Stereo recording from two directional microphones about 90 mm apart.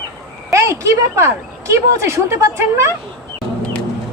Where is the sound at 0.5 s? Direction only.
35° right (ahead or behind).